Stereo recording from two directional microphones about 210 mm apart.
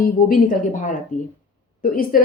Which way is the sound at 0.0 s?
40° left (ahead or behind).